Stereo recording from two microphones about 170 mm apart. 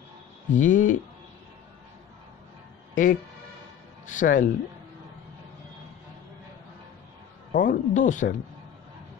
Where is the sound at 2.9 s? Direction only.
50° left (ahead or behind).